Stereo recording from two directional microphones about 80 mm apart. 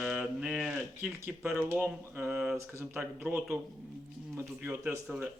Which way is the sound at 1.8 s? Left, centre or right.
Right.